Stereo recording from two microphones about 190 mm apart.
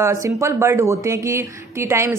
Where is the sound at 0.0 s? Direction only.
15° right (ahead or behind).